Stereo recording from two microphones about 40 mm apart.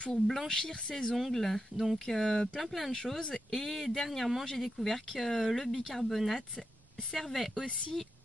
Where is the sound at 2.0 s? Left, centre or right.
Centre.